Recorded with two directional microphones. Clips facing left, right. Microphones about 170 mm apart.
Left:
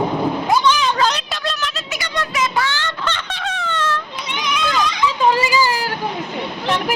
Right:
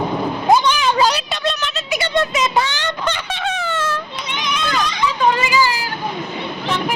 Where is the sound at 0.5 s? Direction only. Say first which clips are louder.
Right 4 dB; 15° right (ahead or behind).